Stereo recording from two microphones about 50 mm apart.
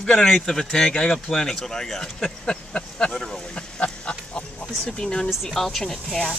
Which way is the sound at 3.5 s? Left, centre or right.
Centre.